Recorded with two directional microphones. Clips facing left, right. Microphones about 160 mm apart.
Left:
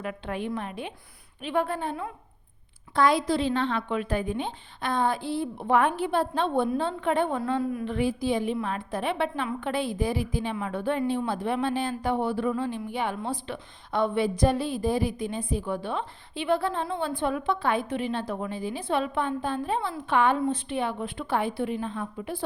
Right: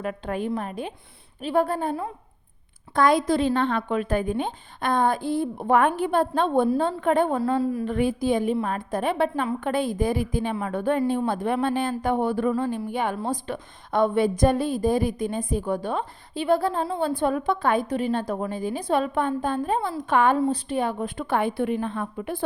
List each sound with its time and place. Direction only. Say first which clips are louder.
0.0 s a woman's voice: right 4 dB; 40° right (ahead or behind)
7.9 s a woman's voice: right 3 dB; 50° right (ahead or behind)